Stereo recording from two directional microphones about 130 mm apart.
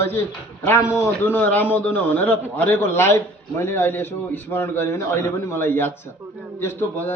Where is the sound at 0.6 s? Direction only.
20° left (ahead or behind).